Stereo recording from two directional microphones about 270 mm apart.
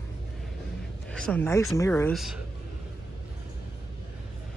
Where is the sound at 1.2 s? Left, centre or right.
Centre.